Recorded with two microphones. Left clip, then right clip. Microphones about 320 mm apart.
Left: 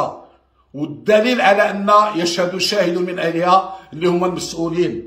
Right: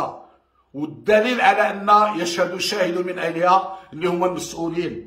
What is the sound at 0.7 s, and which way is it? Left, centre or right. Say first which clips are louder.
A man's voice: left 3 dB; centre.